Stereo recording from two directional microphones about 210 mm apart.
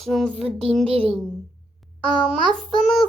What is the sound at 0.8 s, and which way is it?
Child singing, 25° right (ahead or behind).